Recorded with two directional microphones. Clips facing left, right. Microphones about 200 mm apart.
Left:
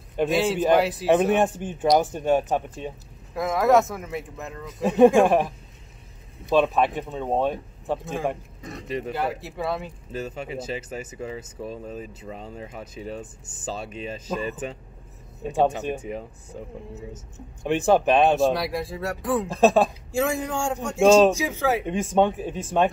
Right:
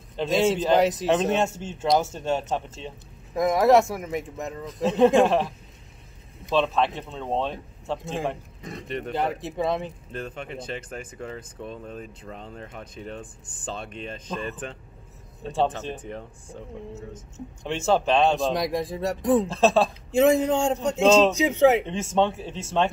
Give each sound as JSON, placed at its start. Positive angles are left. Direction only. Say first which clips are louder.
{"t": 0.1, "sound": "speech", "louder": "even", "side_deg": 15}
{"t": 3.3, "sound": "speech", "louder": "right 1 dB", "side_deg": -15}
{"t": 4.6, "sound": "speech", "louder": "left 3 dB", "side_deg": 10}
{"t": 6.5, "sound": "speech", "louder": "left 3 dB", "side_deg": 15}
{"t": 8.8, "sound": "speech", "louder": "left 3 dB", "side_deg": 0}
{"t": 9.4, "sound": "speech", "louder": "right 3 dB", "side_deg": -20}
{"t": 10.1, "sound": "speech", "louder": "left 4 dB", "side_deg": 5}
{"t": 18.6, "sound": "speech", "louder": "right 2 dB", "side_deg": -15}
{"t": 19.4, "sound": "speech", "louder": "left 2 dB", "side_deg": 15}
{"t": 20.1, "sound": "speech", "louder": "right 6 dB", "side_deg": -20}
{"t": 21.8, "sound": "speech", "louder": "left 2 dB", "side_deg": 15}